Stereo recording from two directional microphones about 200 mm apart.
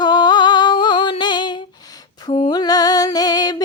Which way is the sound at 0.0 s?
20° left (ahead or behind).